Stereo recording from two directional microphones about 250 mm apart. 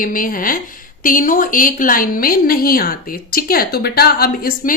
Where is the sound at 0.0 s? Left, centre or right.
Left.